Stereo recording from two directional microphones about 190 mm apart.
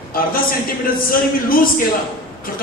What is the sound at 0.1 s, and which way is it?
A man's voice, 50° left (ahead or behind).